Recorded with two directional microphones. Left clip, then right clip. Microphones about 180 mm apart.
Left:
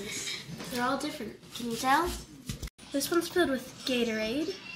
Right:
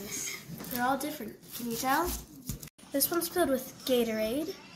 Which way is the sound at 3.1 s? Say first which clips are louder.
Left 2 dB; 20° right (ahead or behind).